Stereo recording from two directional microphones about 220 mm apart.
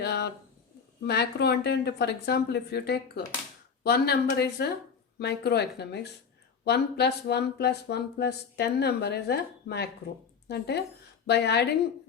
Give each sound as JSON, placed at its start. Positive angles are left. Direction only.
{"t": 0.0, "sound": "speech", "side_deg": 50}